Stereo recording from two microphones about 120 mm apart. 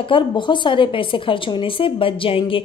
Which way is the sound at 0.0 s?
45° left (ahead or behind).